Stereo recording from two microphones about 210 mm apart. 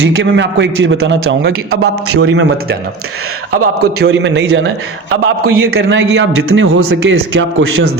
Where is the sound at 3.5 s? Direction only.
90° right.